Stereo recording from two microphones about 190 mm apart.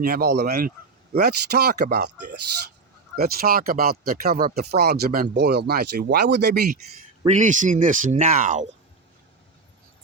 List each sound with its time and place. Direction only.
0.0 s speech: 50° right (ahead or behind)
3.2 s speech: 50° right (ahead or behind)
7.3 s speech: 40° right (ahead or behind)